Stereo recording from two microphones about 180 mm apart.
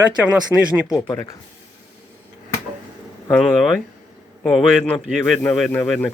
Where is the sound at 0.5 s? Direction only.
15° right (ahead or behind).